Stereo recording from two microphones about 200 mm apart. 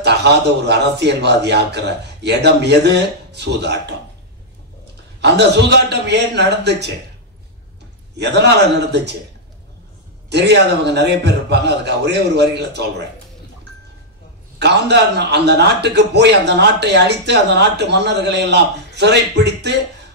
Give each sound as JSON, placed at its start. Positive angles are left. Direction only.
{"t": 0.0, "sound": "a man's voice", "side_deg": -55}
{"t": 5.2, "sound": "a man's voice", "side_deg": -60}
{"t": 8.2, "sound": "a man's voice", "side_deg": -55}
{"t": 10.3, "sound": "a man's voice", "side_deg": -60}
{"t": 14.6, "sound": "a man's voice", "side_deg": -60}